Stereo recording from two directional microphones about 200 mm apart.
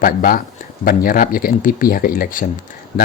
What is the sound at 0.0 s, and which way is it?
Speech, 45° left (ahead or behind).